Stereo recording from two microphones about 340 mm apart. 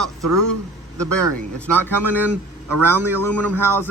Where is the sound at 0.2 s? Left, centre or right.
Right.